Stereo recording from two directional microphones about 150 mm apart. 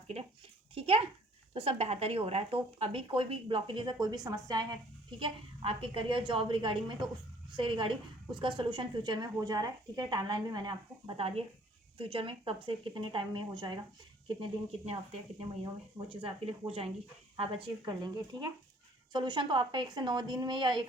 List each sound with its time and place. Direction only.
0.7 s a child's voice: 40° right (ahead or behind)
5.2 s a woman's voice: 40° right (ahead or behind)
15.4 s a woman's voice: 35° right (ahead or behind)